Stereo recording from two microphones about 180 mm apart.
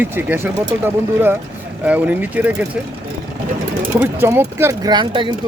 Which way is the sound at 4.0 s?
10° right (ahead or behind).